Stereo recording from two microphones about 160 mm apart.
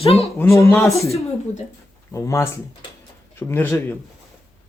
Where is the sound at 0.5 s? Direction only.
20° left (ahead or behind).